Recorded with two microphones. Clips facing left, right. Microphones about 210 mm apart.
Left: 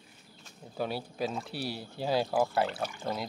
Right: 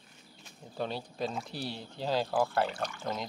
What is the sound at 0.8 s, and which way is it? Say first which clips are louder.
Speech: left 2 dB; 5° left (ahead or behind).